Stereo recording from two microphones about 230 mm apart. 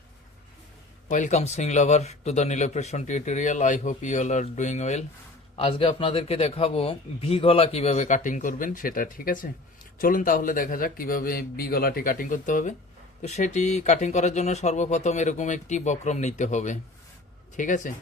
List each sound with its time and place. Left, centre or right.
1.1 s speech: left